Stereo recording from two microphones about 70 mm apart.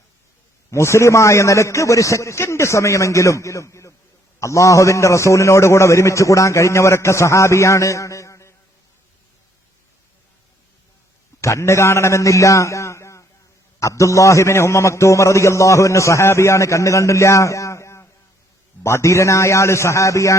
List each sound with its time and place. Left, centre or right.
0.7 s a man's voice: left
11.3 s a man's voice: left